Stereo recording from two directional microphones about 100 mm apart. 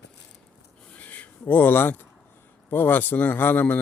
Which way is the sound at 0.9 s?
15° left (ahead or behind).